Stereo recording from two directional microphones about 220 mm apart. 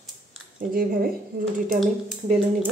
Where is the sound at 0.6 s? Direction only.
40° right (ahead or behind).